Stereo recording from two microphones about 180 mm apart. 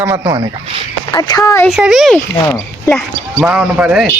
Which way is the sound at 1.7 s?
Centre (ahead or behind).